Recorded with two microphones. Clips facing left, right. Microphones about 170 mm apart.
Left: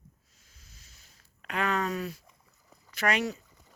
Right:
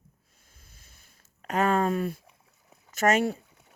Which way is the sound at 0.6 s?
55° right (ahead or behind).